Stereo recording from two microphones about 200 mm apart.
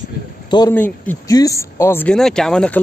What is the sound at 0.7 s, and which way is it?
Speech, 10° left (ahead or behind).